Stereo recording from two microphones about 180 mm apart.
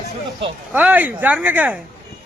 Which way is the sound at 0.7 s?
10° right (ahead or behind).